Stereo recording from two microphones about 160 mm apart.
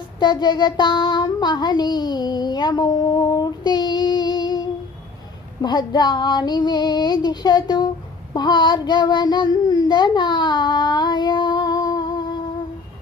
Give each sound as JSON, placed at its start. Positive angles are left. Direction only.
{"t": 0.2, "sound": "child singing", "side_deg": 25}
{"t": 5.6, "sound": "female singing", "side_deg": 25}